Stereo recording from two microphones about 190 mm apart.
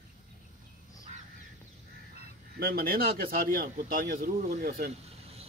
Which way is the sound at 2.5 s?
50° right (ahead or behind).